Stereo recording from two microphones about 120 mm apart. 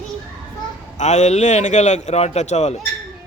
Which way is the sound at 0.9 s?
75° left (ahead or behind).